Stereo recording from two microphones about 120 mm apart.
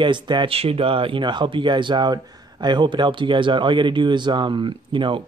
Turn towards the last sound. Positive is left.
turn(degrees=-45)  # may be behind; listen again after turning